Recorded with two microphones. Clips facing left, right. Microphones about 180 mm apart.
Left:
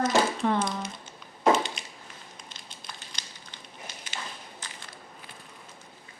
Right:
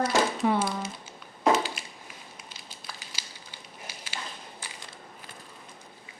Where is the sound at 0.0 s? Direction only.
10° right (ahead or behind).